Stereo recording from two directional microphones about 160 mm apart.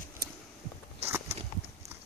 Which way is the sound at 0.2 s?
80° right.